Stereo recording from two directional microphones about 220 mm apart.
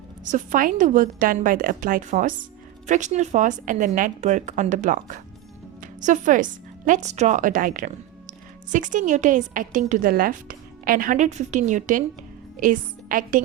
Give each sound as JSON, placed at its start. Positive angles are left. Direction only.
{"t": 0.3, "sound": "a woman's voice", "side_deg": -35}